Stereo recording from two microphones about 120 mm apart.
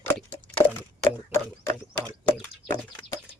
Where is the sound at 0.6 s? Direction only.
30° left (ahead or behind).